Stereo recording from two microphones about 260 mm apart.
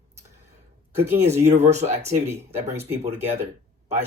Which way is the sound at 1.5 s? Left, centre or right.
Right.